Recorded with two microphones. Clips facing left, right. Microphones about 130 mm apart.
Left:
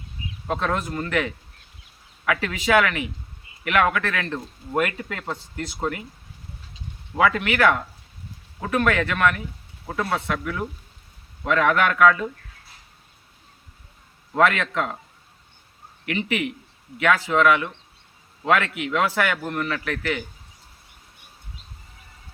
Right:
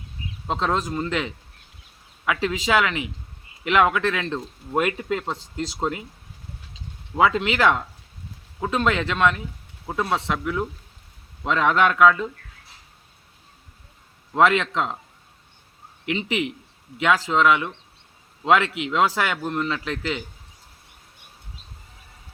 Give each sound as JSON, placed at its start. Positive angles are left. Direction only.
{"t": 0.4, "sound": "a man's voice", "side_deg": -20}
{"t": 7.2, "sound": "a man's voice", "side_deg": -20}
{"t": 14.3, "sound": "a man's voice", "side_deg": -20}
{"t": 16.0, "sound": "a man's voice", "side_deg": -20}